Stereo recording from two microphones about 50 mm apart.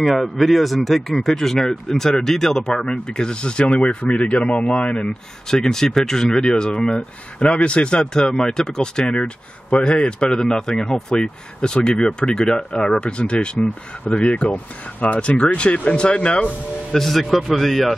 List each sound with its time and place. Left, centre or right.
0.0 s speech: centre; by 5.1 s left
5.5 s speech: centre
16.9 s a man's voice: centre